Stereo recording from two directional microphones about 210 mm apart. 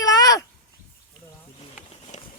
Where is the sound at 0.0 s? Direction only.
15° left (ahead or behind).